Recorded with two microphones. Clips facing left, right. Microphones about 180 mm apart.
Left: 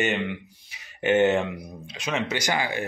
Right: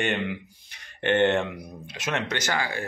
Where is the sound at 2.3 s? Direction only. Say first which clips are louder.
Left 2 dB; 15° left (ahead or behind).